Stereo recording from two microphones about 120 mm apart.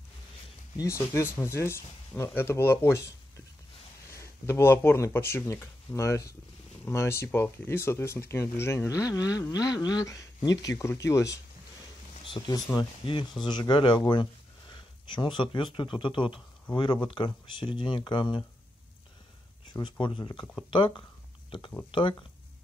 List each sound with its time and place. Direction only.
0.7 s speech: 25° left (ahead or behind)
4.1 s speech: 20° left (ahead or behind)
12.3 s speech: 40° left (ahead or behind)
19.7 s speech: 40° left (ahead or behind)